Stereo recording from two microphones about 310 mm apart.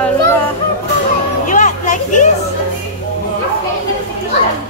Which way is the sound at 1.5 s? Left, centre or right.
Left.